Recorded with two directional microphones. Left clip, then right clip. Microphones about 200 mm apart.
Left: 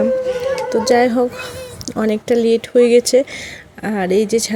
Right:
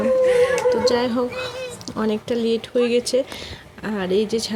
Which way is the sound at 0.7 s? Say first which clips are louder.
Left 4 dB; 30° left (ahead or behind).